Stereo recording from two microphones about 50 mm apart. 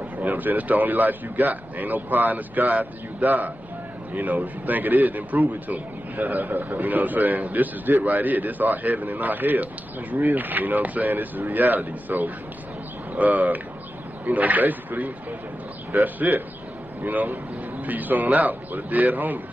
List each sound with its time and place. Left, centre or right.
0.2 s a man's voice: right